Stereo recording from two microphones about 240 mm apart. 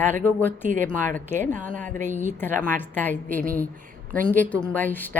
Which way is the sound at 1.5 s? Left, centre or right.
Right.